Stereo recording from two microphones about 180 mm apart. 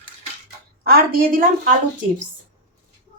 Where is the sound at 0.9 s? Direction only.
50° right (ahead or behind).